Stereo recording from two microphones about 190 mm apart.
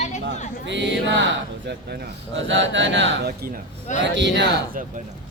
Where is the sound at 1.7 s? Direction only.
70° right (ahead or behind).